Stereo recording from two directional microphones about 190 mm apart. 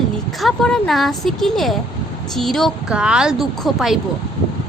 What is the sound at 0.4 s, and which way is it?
A woman's voice, centre (ahead or behind).